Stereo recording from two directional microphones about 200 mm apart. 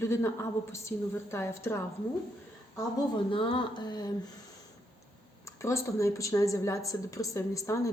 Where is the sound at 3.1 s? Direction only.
25° left (ahead or behind).